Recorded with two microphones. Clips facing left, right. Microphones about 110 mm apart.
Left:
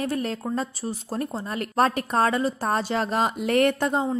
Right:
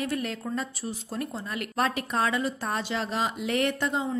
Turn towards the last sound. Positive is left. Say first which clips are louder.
# left 5 dB
turn(degrees=40)  # may be behind; listen again after turning